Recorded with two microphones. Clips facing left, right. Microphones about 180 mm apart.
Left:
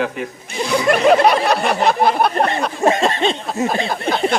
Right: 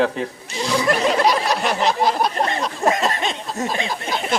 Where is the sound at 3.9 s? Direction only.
60° left (ahead or behind).